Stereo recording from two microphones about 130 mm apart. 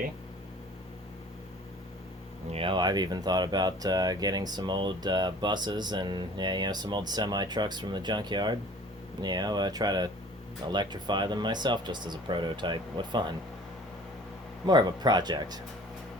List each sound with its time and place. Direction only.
2.5 s speech: 45° right (ahead or behind)
14.7 s speech: 35° right (ahead or behind)